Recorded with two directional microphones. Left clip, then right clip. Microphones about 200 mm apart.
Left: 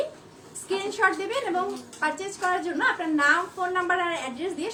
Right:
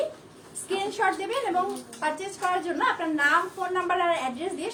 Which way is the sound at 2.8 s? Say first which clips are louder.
Left 1 dB; 15° left (ahead or behind).